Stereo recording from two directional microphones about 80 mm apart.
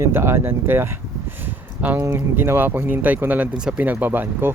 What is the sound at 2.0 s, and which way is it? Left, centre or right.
Speech, right.